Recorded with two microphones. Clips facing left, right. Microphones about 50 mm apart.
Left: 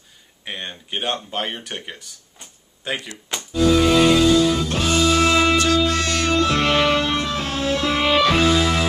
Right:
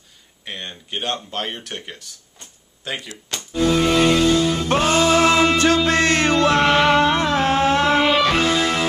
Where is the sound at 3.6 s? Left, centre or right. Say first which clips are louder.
Left 1 dB; right.